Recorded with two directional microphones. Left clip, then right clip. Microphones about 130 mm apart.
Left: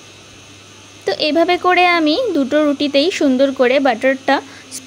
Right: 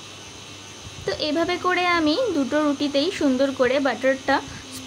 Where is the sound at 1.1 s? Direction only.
55° left (ahead or behind).